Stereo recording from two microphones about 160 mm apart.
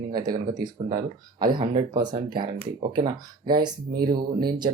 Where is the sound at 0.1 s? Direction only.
25° right (ahead or behind).